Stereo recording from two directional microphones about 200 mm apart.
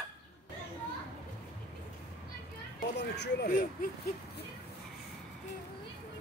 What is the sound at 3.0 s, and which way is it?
Speech, 55° left (ahead or behind).